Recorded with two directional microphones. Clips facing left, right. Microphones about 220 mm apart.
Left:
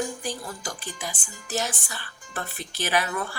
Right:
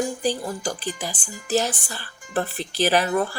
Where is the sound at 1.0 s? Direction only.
35° right (ahead or behind).